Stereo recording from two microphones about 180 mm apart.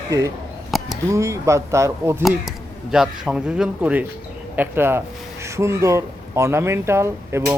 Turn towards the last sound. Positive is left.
turn(degrees=-15)  # may be behind; listen again after turning